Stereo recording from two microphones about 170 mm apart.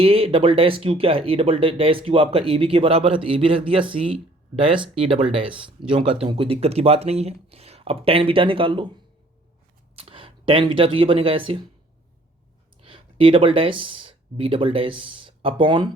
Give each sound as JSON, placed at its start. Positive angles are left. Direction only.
{"t": 0.0, "sound": "speech", "side_deg": -35}
{"t": 9.9, "sound": "speech", "side_deg": -35}
{"t": 12.8, "sound": "speech", "side_deg": -30}